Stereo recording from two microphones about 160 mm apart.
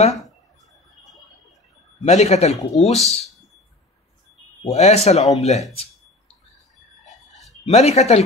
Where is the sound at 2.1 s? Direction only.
45° left (ahead or behind).